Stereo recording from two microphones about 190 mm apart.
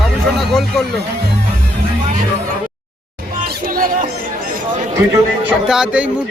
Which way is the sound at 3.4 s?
50° right (ahead or behind).